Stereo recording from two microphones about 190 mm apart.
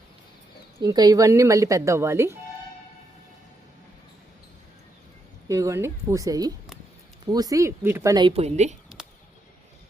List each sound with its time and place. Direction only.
0.8 s speech: 20° right (ahead or behind)
5.5 s a woman's voice: 15° right (ahead or behind); by 8.7 s 35° right (ahead or behind)